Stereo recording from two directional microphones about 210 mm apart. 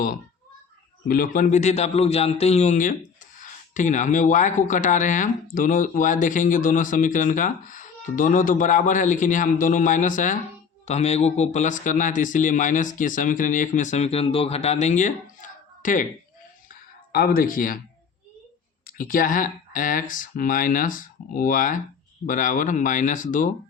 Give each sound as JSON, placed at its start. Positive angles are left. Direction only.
{"t": 1.0, "sound": "speech", "side_deg": 40}
{"t": 17.1, "sound": "speech", "side_deg": 45}
{"t": 18.9, "sound": "speech", "side_deg": 40}